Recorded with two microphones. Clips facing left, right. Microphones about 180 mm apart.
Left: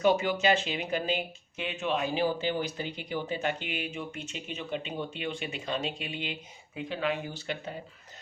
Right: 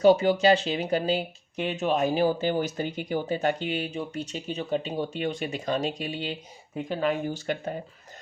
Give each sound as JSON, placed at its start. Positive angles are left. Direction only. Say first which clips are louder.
{"t": 0.0, "sound": "speech", "louder": "right 6 dB", "side_deg": -35}